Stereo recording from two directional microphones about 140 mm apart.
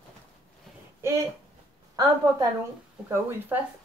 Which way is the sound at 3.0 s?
20° right (ahead or behind).